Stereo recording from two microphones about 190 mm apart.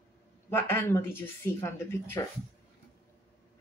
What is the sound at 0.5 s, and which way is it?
Speech, 10° left (ahead or behind).